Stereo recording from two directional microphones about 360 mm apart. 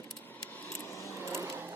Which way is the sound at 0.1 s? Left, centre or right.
Centre.